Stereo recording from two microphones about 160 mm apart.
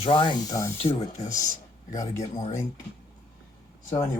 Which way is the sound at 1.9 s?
20° left (ahead or behind).